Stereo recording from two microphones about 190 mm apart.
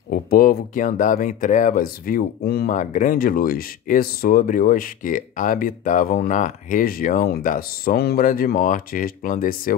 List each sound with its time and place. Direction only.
0.1 s speech: 50° left (ahead or behind)